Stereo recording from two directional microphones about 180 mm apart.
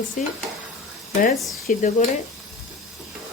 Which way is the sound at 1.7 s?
45° left (ahead or behind).